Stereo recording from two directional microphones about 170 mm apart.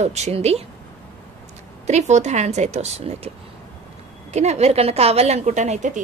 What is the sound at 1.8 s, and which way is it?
A woman's voice, 40° right (ahead or behind).